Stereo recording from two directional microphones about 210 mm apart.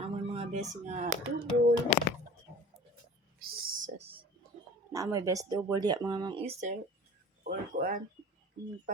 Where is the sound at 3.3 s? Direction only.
40° right (ahead or behind).